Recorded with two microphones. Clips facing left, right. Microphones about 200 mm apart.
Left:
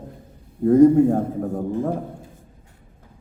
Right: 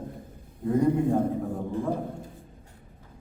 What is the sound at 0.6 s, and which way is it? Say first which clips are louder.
Speech: left 12 dB; 45° left (ahead or behind).